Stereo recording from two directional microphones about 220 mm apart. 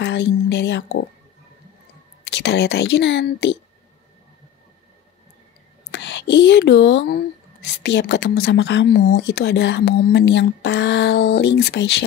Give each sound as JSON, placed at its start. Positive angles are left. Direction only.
{"t": 0.0, "sound": "speech", "side_deg": 50}
{"t": 2.3, "sound": "speech", "side_deg": 50}
{"t": 5.9, "sound": "speech", "side_deg": 50}